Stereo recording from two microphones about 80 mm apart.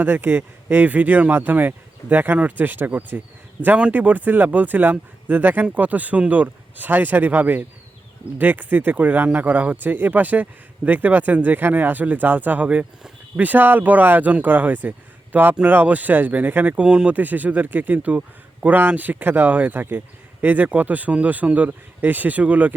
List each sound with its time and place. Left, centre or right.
0.0 s speech: right